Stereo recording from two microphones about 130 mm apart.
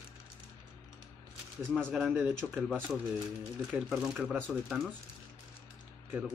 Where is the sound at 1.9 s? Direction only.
5° right (ahead or behind).